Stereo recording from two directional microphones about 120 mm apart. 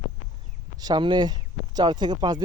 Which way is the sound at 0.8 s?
35° right (ahead or behind).